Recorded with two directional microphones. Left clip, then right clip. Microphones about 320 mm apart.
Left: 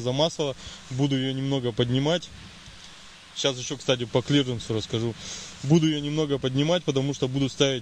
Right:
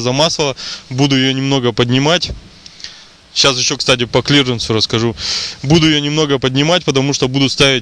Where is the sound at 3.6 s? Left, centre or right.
Right.